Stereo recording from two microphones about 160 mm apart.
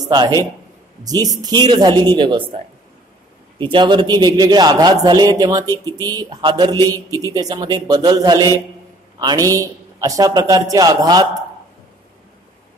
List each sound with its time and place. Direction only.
0.0 s a man's voice: 25° right (ahead or behind)
3.5 s a man's voice: 30° right (ahead or behind)